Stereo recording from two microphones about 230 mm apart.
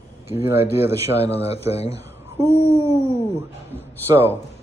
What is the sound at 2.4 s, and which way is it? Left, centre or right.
Speech, centre.